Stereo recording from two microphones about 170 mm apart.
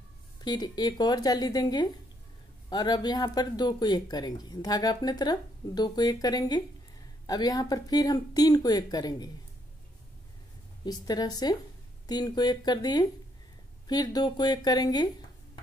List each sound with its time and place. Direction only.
0.4 s speech: 25° left (ahead or behind)
10.9 s speech: 25° left (ahead or behind)